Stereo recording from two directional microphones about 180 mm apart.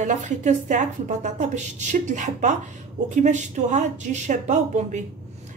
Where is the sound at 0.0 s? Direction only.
40° right (ahead or behind).